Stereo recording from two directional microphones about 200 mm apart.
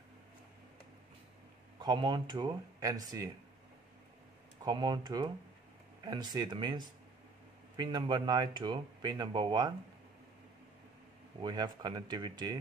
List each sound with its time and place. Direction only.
1.8 s speech: 20° right (ahead or behind)
4.6 s speech: 25° right (ahead or behind)
11.4 s speech: 20° right (ahead or behind)